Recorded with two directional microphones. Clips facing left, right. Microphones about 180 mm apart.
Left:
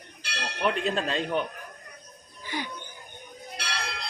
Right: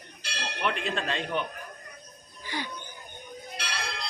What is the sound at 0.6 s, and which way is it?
Speech, 35° left (ahead or behind).